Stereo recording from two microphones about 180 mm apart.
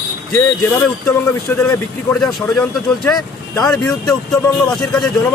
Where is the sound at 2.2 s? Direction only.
5° left (ahead or behind).